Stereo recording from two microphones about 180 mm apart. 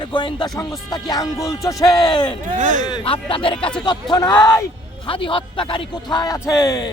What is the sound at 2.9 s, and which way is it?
Speech, 25° left (ahead or behind).